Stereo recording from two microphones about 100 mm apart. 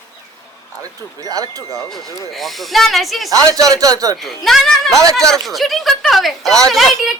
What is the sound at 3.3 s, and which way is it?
Speech, 35° right (ahead or behind).